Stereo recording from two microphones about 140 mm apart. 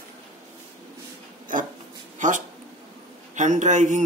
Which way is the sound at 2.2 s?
65° right (ahead or behind).